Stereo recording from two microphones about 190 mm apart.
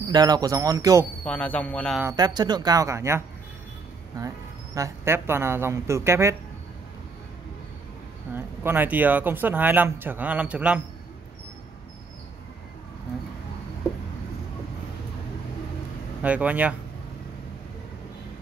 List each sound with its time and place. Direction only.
0.1 s speech: 20° right (ahead or behind)
1.2 s speech: 5° left (ahead or behind)
2.1 s speech: 20° right (ahead or behind)
8.4 s speech: 10° right (ahead or behind)
16.2 s speech: 10° right (ahead or behind)